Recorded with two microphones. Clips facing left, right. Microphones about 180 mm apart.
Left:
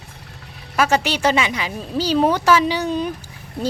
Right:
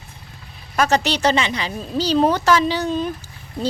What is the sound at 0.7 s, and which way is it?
Speech, 10° left (ahead or behind).